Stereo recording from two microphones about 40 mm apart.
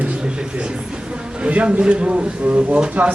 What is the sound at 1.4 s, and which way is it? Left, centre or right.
A man's voice, right.